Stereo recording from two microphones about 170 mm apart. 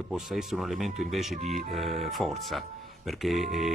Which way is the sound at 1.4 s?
40° right (ahead or behind).